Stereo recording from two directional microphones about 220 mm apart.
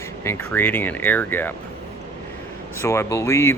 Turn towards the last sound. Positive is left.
turn(degrees=15)  # may be behind; listen again after turning